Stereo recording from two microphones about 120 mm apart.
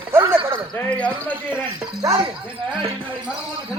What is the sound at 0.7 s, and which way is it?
Speech, 10° left (ahead or behind).